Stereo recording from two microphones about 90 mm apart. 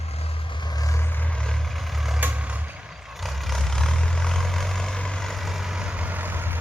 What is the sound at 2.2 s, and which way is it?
Vehicle, 20° right (ahead or behind).